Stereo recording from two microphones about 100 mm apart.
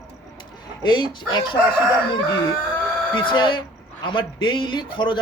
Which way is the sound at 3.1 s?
50° left (ahead or behind).